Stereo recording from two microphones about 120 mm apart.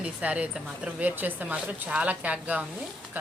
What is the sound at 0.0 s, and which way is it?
A woman's voice, 10° right (ahead or behind).